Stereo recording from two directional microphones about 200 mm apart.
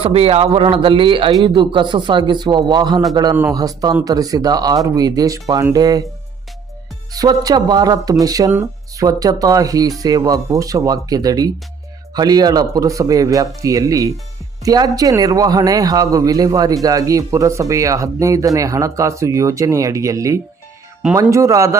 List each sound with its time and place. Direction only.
0.0 s speech: 30° right (ahead or behind)
7.1 s speech: 20° right (ahead or behind)